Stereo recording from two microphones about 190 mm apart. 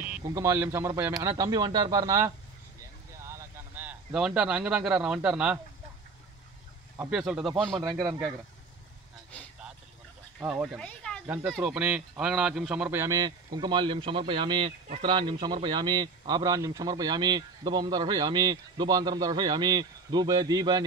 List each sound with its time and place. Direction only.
0.0 s a man's voice: 10° right (ahead or behind)
7.0 s a man's voice: 5° right (ahead or behind)
7.8 s speech: 15° right (ahead or behind)
10.4 s speech: 5° right (ahead or behind)
11.2 s a man's voice: 5° right (ahead or behind)
13.0 s a man's voice: 20° right (ahead or behind)